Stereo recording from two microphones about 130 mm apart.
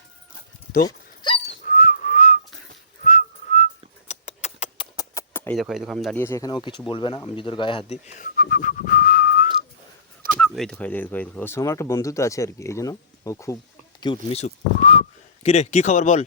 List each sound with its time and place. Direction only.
0.9 s dog: 40° left (ahead or behind)
1.6 s whistling: 90° left; by 3.7 s 70° left (ahead or behind)
4.1 s a sound: 60° left (ahead or behind)
4.9 s a sound: 25° left (ahead or behind)
5.5 s speech: 5° right (ahead or behind)
6.1 s speech: 20° left (ahead or behind)
6.5 s speech: 35° left (ahead or behind)
7.9 s speech: 70° left (ahead or behind); by 9.5 s 90° left
10.4 s speech: 5° left (ahead or behind); by 13.6 s 25° left (ahead or behind)
14.0 s speech: 40° left (ahead or behind)
14.3 s speech: 50° left (ahead or behind)